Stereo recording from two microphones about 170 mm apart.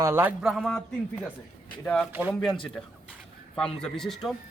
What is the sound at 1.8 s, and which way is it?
Speech, 5° left (ahead or behind).